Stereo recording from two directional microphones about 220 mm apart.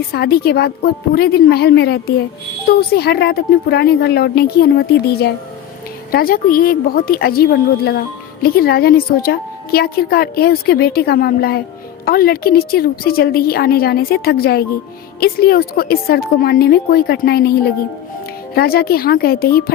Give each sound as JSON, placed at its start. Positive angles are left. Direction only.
{"t": 0.1, "sound": "a woman's voice", "side_deg": 45}